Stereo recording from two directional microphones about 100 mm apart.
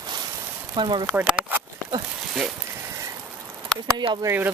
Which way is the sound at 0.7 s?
50° right (ahead or behind).